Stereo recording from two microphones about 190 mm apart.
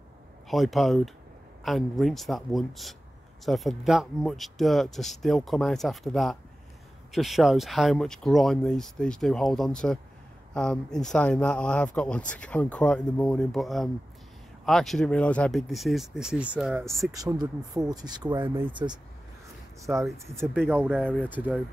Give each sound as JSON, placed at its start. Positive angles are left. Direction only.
{"t": 0.5, "sound": "speech", "side_deg": 0}
{"t": 17.1, "sound": "speech", "side_deg": -20}
{"t": 20.9, "sound": "speech", "side_deg": 5}
{"t": 21.3, "sound": "speech", "side_deg": -10}